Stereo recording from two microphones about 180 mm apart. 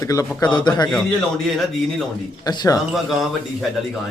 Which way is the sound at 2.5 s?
20° left (ahead or behind).